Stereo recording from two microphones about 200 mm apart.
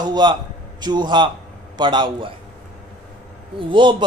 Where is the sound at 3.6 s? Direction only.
25° right (ahead or behind).